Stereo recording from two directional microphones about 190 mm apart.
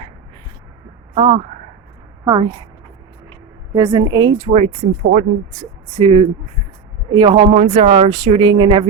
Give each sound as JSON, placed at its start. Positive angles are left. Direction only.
{"t": 1.1, "sound": "speech", "side_deg": -30}
{"t": 3.8, "sound": "speech", "side_deg": -25}